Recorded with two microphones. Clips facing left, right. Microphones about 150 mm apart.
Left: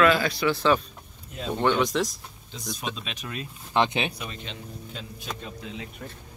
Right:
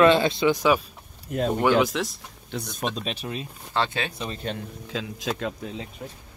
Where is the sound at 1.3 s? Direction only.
50° right (ahead or behind).